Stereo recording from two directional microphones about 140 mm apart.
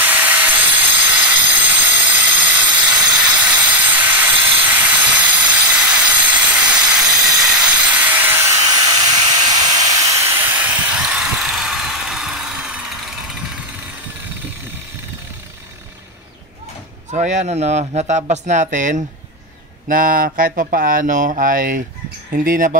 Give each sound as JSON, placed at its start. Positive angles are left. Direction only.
{"t": 0.0, "sound": "sawing", "side_deg": -10}
{"t": 2.9, "sound": "train", "side_deg": -5}
{"t": 17.1, "sound": "speech", "side_deg": -55}
{"t": 19.9, "sound": "speech", "side_deg": -80}
{"t": 22.3, "sound": "speech", "side_deg": -85}